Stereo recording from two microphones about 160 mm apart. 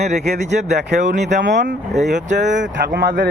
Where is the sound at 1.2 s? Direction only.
90° right; by 1.7 s 75° right (ahead or behind).